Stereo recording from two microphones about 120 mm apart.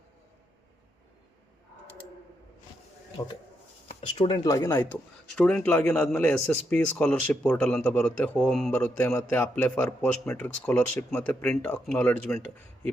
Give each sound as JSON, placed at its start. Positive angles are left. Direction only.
{"t": 3.2, "sound": "speech", "side_deg": 25}
{"t": 4.0, "sound": "a man's voice", "side_deg": 40}